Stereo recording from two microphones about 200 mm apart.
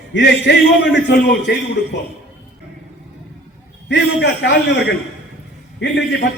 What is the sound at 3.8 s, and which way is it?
A man's voice, 60° left (ahead or behind).